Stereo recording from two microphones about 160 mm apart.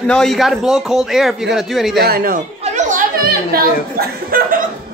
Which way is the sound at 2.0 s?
70° right (ahead or behind).